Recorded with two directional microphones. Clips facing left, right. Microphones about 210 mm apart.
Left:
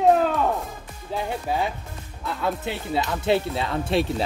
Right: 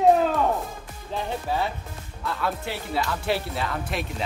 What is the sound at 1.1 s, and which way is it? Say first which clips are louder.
Speech: left 1 dB; 15° left (ahead or behind).